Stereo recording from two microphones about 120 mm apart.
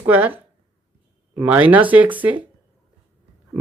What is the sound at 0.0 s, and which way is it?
Speech, 15° right (ahead or behind).